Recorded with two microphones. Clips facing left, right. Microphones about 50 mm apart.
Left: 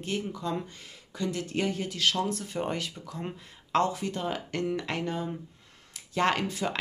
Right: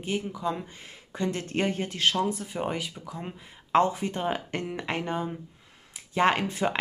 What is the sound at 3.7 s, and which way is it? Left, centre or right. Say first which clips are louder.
Speech: right 3 dB; right.